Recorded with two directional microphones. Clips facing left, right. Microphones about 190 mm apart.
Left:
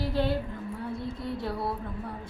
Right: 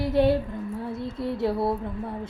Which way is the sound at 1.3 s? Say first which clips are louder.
Right 9 dB; 25° right (ahead or behind).